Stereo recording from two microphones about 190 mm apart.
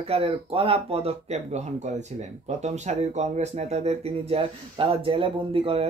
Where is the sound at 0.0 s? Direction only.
30° right (ahead or behind).